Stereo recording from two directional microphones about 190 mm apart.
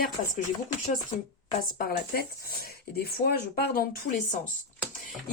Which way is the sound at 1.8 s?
55° left (ahead or behind).